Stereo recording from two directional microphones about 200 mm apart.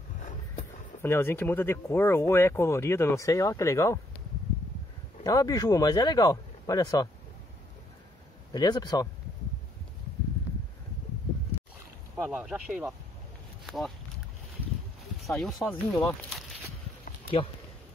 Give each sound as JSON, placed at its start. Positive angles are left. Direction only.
{"t": 1.0, "sound": "speech", "side_deg": 10}
{"t": 5.2, "sound": "speech", "side_deg": 20}
{"t": 8.5, "sound": "speech", "side_deg": 20}
{"t": 12.2, "sound": "speech", "side_deg": -5}
{"t": 15.2, "sound": "speech", "side_deg": 0}